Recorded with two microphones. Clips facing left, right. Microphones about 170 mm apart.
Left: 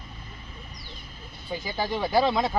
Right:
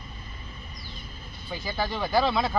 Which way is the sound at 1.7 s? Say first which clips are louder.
Left 1 dB; 15° left (ahead or behind).